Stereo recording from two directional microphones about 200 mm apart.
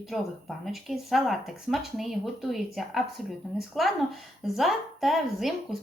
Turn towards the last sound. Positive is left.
turn(degrees=0)  # may be behind; listen again after turning